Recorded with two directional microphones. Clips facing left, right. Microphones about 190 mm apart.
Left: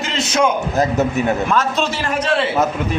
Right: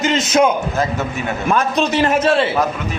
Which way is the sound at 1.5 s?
15° right (ahead or behind).